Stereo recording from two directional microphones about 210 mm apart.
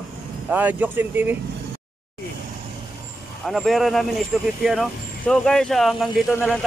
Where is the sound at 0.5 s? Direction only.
10° right (ahead or behind).